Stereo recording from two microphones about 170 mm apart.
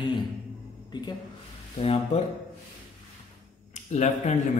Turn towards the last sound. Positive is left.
turn(degrees=40)  # may be behind; listen again after turning